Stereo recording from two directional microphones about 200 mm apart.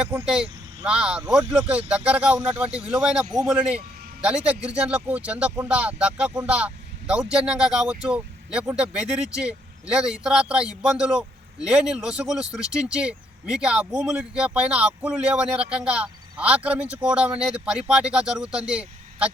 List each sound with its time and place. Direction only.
0.0 s speech: 5° right (ahead or behind)